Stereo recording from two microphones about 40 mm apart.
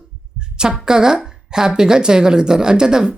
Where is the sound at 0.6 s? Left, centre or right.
Centre.